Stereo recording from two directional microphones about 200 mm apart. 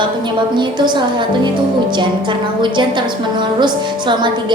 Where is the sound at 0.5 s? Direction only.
20° right (ahead or behind).